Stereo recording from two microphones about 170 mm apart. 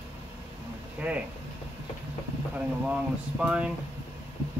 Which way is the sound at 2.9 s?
5° right (ahead or behind).